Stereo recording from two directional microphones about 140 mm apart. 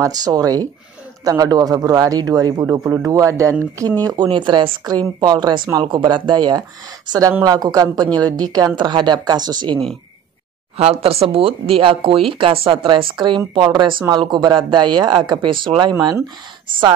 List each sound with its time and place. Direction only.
0.0 s a woman's voice: 25° right (ahead or behind)
10.8 s speech: 45° right (ahead or behind)
15.9 s a woman's voice: 25° right (ahead or behind)